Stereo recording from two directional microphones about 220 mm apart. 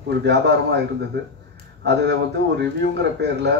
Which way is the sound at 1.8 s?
50° right (ahead or behind).